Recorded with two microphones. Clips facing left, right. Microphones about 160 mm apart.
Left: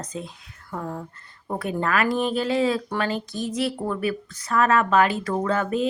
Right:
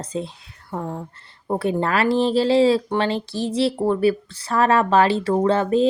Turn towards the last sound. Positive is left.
turn(degrees=-30)  # may be behind; listen again after turning